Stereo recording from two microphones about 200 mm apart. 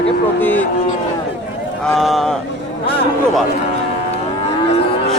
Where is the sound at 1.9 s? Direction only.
Centre (ahead or behind).